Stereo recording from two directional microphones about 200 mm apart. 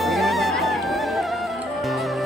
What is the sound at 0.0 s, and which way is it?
Music, centre (ahead or behind).